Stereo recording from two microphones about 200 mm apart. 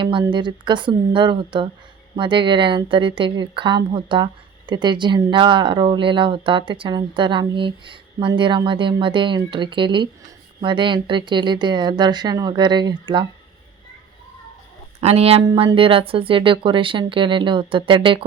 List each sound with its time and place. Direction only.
0.0 s a woman's voice: 25° right (ahead or behind)
15.0 s a woman's voice: 30° right (ahead or behind)